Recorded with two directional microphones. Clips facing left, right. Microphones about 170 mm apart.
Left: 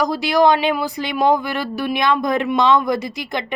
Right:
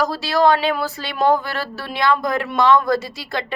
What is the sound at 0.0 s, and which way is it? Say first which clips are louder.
A woman's voice: left 2 dB; 15° left (ahead or behind).